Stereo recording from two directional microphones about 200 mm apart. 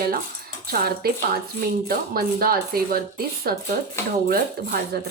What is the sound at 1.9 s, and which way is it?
Speech, 45° right (ahead or behind).